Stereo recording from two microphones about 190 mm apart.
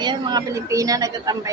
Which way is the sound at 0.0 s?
20° right (ahead or behind).